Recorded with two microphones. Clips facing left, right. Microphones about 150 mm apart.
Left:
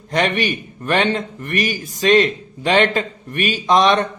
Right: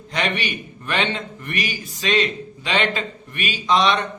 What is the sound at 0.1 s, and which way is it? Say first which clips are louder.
A man's voice: left 6 dB; 45° left (ahead or behind).